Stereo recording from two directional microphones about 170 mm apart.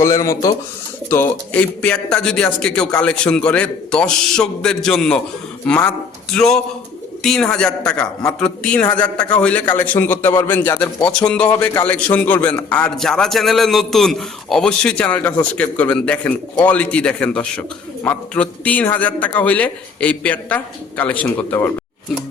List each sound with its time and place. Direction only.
0.0 s a man's voice: 20° left (ahead or behind)